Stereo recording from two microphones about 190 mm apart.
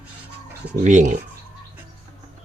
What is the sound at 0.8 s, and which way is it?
Speech, 40° right (ahead or behind).